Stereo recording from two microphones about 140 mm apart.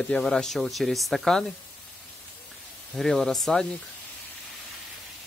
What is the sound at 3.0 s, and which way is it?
Speech, centre (ahead or behind).